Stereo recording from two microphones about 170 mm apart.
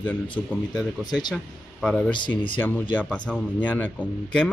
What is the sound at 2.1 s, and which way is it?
Speech, 30° left (ahead or behind).